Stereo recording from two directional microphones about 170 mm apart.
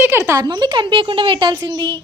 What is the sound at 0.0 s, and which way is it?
Speech, 15° right (ahead or behind).